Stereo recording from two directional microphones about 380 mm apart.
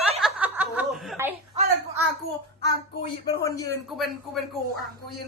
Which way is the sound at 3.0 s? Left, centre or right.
Centre.